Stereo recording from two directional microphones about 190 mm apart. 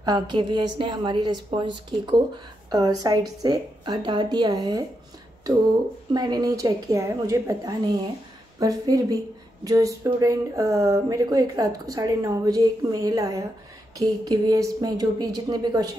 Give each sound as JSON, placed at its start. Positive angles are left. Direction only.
{"t": 0.0, "sound": "speech", "side_deg": -20}
{"t": 6.1, "sound": "speech", "side_deg": -20}